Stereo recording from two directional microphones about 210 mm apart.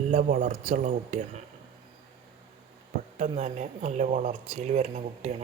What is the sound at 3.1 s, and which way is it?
Speech, 35° right (ahead or behind).